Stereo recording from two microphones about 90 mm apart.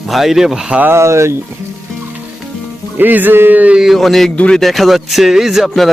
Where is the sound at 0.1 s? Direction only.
5° right (ahead or behind).